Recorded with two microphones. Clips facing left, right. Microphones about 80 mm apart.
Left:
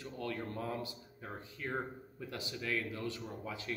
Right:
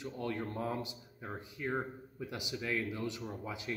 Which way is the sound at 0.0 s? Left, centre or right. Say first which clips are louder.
Right 2 dB; right.